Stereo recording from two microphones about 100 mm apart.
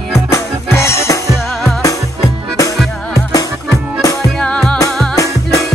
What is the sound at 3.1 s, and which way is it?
Music, 35° left (ahead or behind).